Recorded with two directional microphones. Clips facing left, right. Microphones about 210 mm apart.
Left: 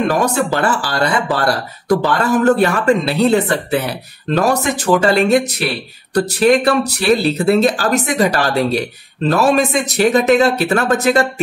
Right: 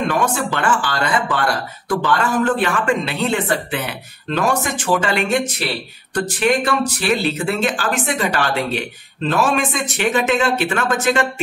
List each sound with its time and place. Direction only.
0.1 s speech: 40° left (ahead or behind)